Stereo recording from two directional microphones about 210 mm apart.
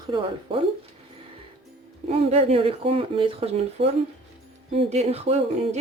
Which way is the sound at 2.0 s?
30° right (ahead or behind).